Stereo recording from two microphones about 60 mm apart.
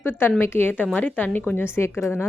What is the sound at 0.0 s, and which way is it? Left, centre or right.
Speech, left.